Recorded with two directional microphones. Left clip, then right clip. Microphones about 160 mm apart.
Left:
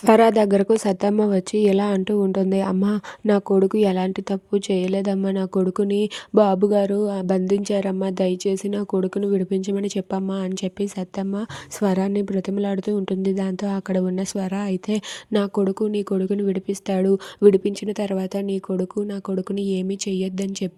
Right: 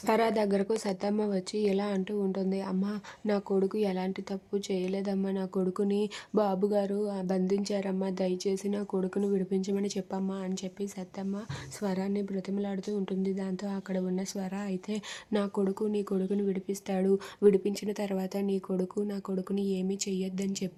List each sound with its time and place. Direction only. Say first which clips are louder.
0.0 s a woman's voice: left 12 dB; 45° left (ahead or behind)